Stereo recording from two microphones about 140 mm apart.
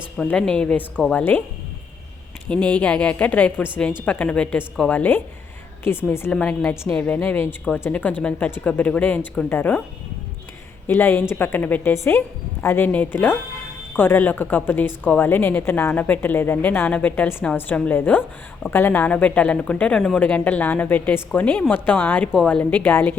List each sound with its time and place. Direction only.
0.2 s a woman's voice: 5° left (ahead or behind)
2.5 s a woman's voice: 10° left (ahead or behind)
10.8 s a woman's voice: 15° left (ahead or behind)